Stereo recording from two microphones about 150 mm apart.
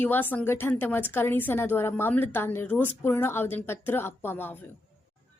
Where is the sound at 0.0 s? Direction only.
10° left (ahead or behind).